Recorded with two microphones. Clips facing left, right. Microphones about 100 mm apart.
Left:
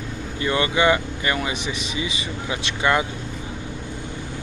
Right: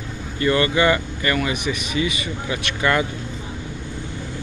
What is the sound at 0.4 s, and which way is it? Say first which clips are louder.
Speech: right 2 dB; 15° left (ahead or behind).